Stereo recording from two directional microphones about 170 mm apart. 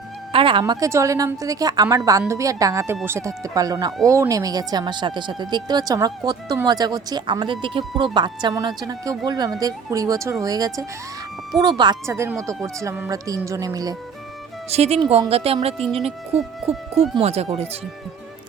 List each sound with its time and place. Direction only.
0.3 s music: 30° right (ahead or behind)
0.6 s speech: 20° right (ahead or behind)
12.0 s speech: 15° right (ahead or behind)
14.7 s speech: 40° right (ahead or behind)